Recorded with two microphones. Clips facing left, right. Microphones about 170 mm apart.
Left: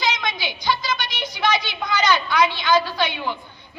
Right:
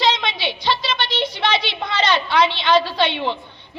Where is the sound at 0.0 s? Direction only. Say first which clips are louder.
Right 4 dB; 30° right (ahead or behind).